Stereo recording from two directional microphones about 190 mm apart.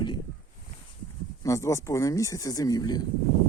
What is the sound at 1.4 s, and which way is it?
Speech, 15° left (ahead or behind).